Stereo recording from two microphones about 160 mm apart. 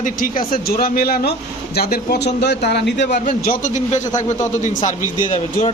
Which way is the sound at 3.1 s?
55° left (ahead or behind).